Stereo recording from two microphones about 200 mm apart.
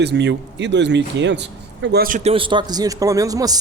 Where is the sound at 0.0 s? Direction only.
60° right (ahead or behind).